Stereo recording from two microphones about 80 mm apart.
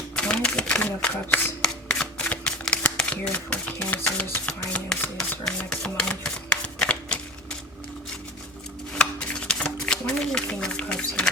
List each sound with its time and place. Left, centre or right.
0.2 s a sound: centre
1.6 s shuffling cards: centre
3.0 s speech: centre
4.4 s speech: centre
6.7 s typewriter: centre
9.0 s shuffling cards: centre